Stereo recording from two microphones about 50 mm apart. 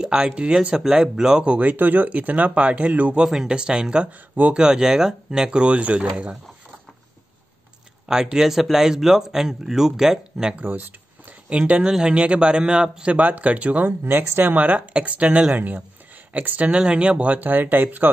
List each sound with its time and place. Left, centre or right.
0.0 s speech: centre
1.6 s speech: right
3.3 s speech: centre
5.6 s a man's voice: right
8.1 s speech: centre
10.3 s speech: centre
10.6 s speech: right
11.4 s a man's voice: right
11.8 s a man's voice: centre
13.1 s a man's voice: right
17.4 s speech: right